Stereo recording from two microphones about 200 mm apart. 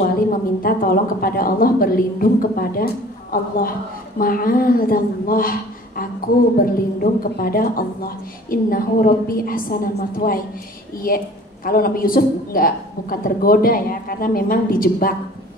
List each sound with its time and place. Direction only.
0.3 s a woman's voice: 45° left (ahead or behind)